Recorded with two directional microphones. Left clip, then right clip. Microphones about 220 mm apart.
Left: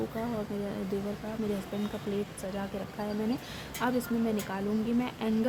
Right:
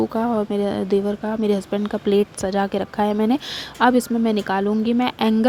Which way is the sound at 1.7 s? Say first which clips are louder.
Right 15 dB; 45° right (ahead or behind).